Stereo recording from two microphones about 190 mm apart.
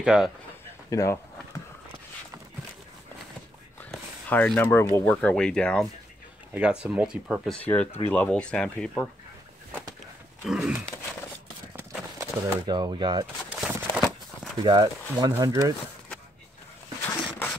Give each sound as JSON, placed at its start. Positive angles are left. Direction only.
{"t": 0.0, "sound": "speech", "side_deg": -5}
{"t": 0.8, "sound": "a sound", "side_deg": 15}
{"t": 4.3, "sound": "speech", "side_deg": 10}
{"t": 6.5, "sound": "speech", "side_deg": -5}
{"t": 10.4, "sound": "speech", "side_deg": -5}
{"t": 12.2, "sound": "speech", "side_deg": -20}
{"t": 13.5, "sound": "a sound", "side_deg": -5}
{"t": 14.6, "sound": "speech", "side_deg": -25}
{"t": 17.0, "sound": "a sound", "side_deg": 10}